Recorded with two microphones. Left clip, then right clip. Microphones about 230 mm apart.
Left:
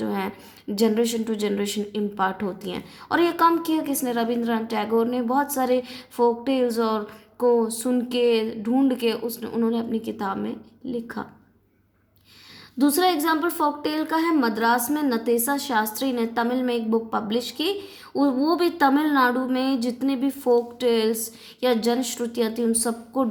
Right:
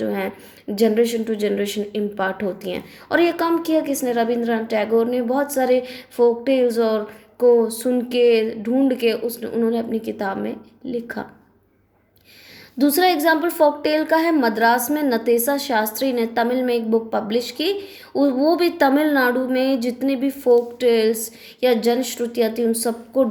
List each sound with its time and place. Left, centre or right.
0.0 s a sound: centre
0.9 s a woman's voice: centre
12.9 s speech: centre